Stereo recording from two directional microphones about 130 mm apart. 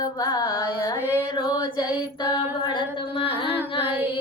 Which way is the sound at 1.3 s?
30° left (ahead or behind).